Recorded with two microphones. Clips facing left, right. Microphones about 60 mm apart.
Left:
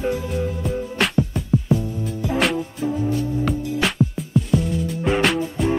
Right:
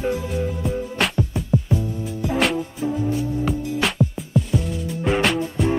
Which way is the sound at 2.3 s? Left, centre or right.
Centre.